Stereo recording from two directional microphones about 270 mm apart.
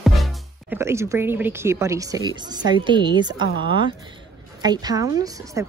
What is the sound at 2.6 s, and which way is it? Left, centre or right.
A woman's voice, centre.